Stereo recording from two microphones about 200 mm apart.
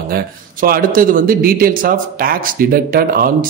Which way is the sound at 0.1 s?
45° right (ahead or behind).